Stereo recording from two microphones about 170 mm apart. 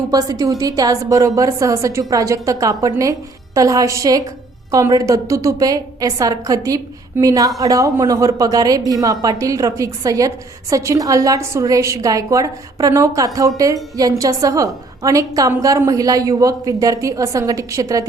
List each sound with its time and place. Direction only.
0.1 s a woman's voice: 20° right (ahead or behind)